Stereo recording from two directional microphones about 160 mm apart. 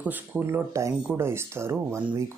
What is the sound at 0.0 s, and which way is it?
Speech, 10° right (ahead or behind).